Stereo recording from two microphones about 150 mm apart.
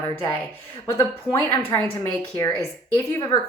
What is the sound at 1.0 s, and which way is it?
A woman's voice, 20° left (ahead or behind).